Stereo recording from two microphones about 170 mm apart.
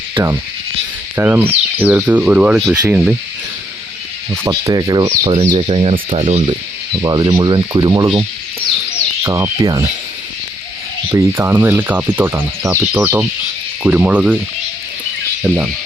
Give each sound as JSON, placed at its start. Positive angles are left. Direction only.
{"t": 0.2, "sound": "speech", "side_deg": -30}
{"t": 1.1, "sound": "cricket", "side_deg": -10}
{"t": 4.4, "sound": "speech", "side_deg": -20}
{"t": 5.5, "sound": "speech", "side_deg": -35}
{"t": 7.0, "sound": "speech", "side_deg": -25}
{"t": 9.2, "sound": "speech", "side_deg": -15}
{"t": 11.1, "sound": "cricket", "side_deg": -15}
{"t": 15.4, "sound": "cricket", "side_deg": -10}